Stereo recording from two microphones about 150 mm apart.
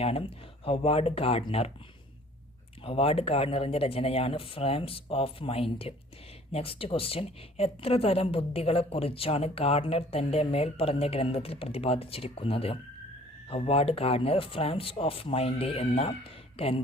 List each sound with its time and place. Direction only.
0.0 s a woman's voice: 40° left (ahead or behind)
2.8 s a woman's voice: 40° left (ahead or behind)